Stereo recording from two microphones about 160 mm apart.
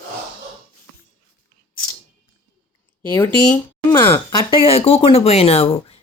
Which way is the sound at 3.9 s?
15° left (ahead or behind).